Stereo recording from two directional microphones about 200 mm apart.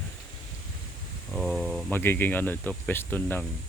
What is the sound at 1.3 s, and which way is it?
Speech, centre (ahead or behind).